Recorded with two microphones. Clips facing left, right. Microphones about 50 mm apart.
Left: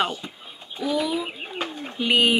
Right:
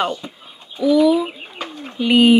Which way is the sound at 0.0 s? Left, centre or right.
Centre.